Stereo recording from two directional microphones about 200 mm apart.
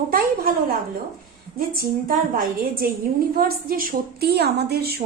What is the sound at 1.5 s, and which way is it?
A woman's voice, 45° right (ahead or behind).